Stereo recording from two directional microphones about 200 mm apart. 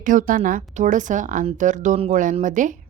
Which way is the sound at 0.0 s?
40° right (ahead or behind).